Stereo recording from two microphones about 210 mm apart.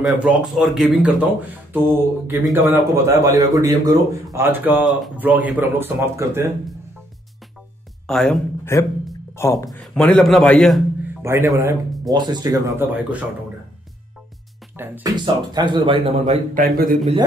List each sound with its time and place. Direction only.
0.0 s speech: centre (ahead or behind)
2.7 s a man's voice: 15° right (ahead or behind)
8.1 s speech: centre (ahead or behind)
8.7 s speech: 15° left (ahead or behind)
9.7 s speech: centre (ahead or behind)
11.2 s a man's voice: 10° right (ahead or behind)
14.8 s speech: 20° right (ahead or behind)
16.5 s a man's voice: 40° right (ahead or behind)